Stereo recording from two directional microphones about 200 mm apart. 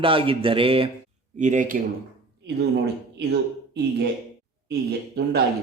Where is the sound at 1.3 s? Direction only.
40° right (ahead or behind).